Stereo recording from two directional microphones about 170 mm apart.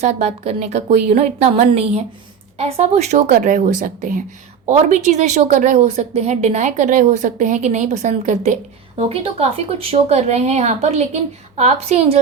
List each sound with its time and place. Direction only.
0.0 s a woman's voice: 40° right (ahead or behind)
4.7 s a woman's voice: 40° right (ahead or behind)